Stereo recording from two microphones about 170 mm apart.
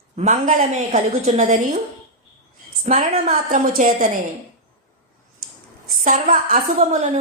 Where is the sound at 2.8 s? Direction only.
45° right (ahead or behind).